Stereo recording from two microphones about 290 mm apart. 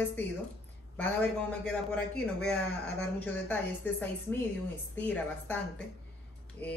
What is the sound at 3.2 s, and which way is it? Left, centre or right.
A woman's voice, centre.